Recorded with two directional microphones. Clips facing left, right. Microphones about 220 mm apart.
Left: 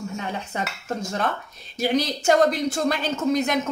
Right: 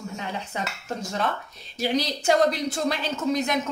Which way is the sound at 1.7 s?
50° left (ahead or behind).